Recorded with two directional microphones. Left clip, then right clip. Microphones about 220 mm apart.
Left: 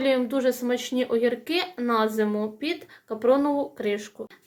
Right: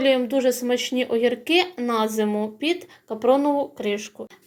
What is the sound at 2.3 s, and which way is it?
Speech, 10° right (ahead or behind).